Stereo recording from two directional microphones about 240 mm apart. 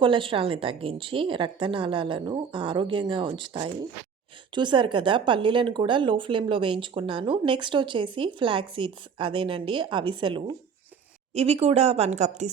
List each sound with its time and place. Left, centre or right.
0.0 s a woman's voice: right